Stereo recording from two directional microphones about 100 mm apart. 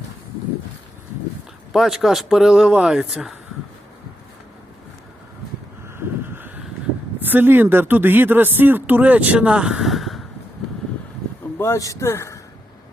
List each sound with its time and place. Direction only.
1.7 s speech: centre (ahead or behind)
6.0 s vehicle: 20° right (ahead or behind)
7.2 s speech: 20° right (ahead or behind); by 10.2 s centre (ahead or behind)
11.5 s a man's voice: 30° left (ahead or behind)